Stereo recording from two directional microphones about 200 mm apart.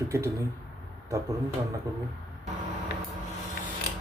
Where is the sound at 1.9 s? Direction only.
15° right (ahead or behind).